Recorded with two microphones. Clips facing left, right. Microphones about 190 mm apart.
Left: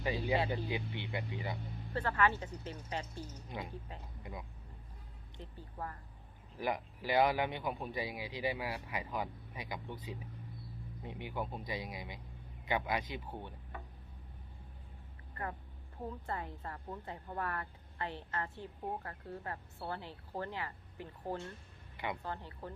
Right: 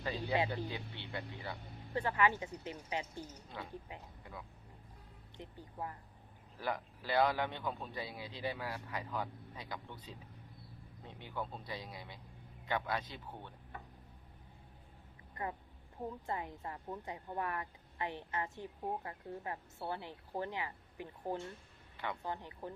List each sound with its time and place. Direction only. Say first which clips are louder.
0.0 s speech: left 2 dB; 15° left (ahead or behind)
1.9 s a woman's voice: even; 15° right (ahead or behind)
4.2 s speech: left 7 dB; 15° left (ahead or behind)
5.4 s a woman's voice: even; 15° right (ahead or behind)
6.6 s speech: left 3 dB; 15° left (ahead or behind)
16.0 s a woman's voice: even; 15° right (ahead or behind)
21.9 s speech: left 2 dB; 10° left (ahead or behind)
22.2 s a woman's voice: right 1 dB; 15° right (ahead or behind)